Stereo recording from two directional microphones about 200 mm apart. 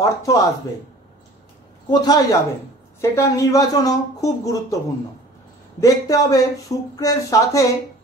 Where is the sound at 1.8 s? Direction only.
20° left (ahead or behind).